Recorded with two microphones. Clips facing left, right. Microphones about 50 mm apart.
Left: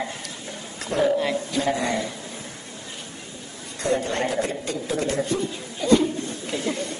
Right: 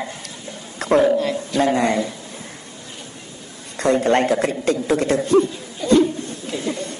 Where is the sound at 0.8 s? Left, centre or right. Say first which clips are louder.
Right 8 dB; right.